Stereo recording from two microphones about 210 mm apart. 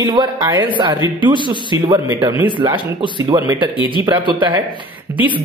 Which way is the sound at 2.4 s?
25° right (ahead or behind).